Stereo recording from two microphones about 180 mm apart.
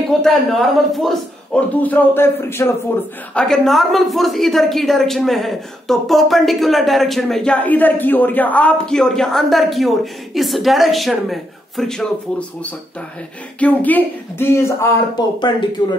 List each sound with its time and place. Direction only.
0.2 s a man's voice: centre (ahead or behind)
3.3 s a woman's voice: 5° left (ahead or behind)
13.6 s a man's voice: 10° left (ahead or behind)